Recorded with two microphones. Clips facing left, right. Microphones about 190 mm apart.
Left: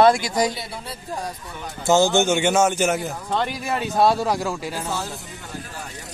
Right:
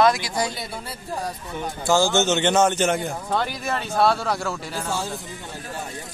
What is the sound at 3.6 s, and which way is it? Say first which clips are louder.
Speech: left 2 dB; 15° left (ahead or behind).